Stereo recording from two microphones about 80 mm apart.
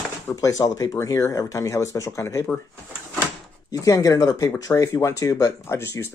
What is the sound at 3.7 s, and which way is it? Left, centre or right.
Speech, left.